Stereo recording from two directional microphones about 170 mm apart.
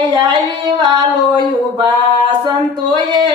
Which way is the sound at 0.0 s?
25° right (ahead or behind).